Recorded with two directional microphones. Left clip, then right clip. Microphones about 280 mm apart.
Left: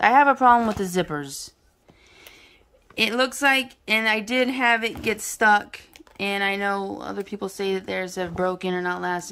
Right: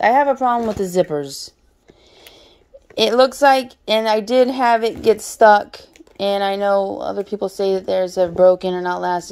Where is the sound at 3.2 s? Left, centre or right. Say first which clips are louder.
Right 8 dB; centre.